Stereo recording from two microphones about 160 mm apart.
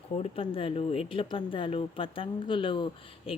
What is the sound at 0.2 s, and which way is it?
Speech, 35° left (ahead or behind).